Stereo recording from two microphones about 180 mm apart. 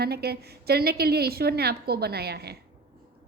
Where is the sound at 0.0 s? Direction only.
60° right (ahead or behind).